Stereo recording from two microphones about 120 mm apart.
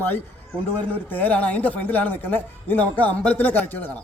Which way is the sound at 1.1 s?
15° left (ahead or behind).